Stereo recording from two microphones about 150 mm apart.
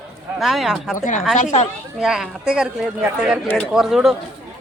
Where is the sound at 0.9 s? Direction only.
60° left (ahead or behind).